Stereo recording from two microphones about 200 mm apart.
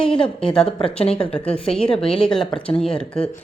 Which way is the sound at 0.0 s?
25° left (ahead or behind).